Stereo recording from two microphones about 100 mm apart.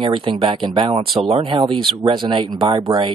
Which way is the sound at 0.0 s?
55° right (ahead or behind).